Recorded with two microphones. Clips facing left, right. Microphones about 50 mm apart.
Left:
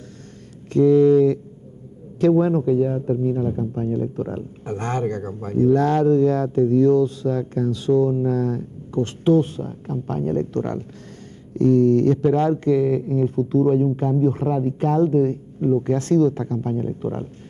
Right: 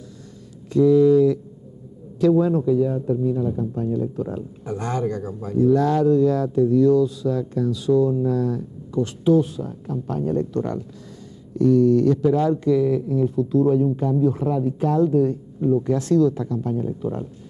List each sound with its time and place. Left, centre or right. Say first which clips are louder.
0.7 s a man's voice: left 1 dB; left